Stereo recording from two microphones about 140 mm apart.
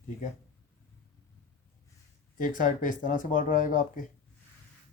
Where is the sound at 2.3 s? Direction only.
70° left (ahead or behind).